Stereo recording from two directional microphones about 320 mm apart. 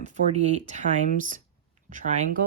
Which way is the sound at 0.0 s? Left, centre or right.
Right.